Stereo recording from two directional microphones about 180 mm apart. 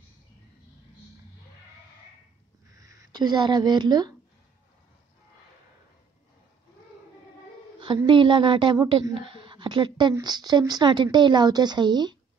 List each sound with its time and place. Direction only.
2.7 s speech: 15° right (ahead or behind)
7.8 s a woman's voice: 25° right (ahead or behind)